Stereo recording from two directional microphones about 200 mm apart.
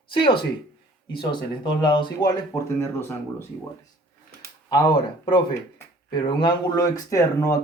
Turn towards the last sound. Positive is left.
turn(degrees=15)  # may be behind; listen again after turning